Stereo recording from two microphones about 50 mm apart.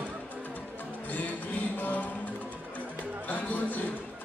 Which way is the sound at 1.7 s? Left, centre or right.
Left.